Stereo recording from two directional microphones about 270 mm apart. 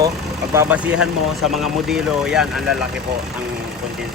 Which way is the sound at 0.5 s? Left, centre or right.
Centre.